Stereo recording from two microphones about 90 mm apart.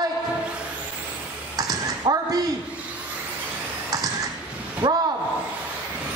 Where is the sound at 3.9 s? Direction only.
45° right (ahead or behind).